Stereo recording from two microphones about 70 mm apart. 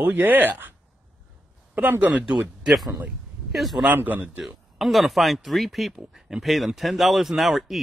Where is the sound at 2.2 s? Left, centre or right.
Centre.